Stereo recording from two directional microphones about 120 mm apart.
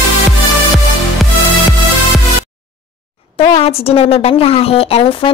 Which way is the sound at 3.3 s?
55° left (ahead or behind).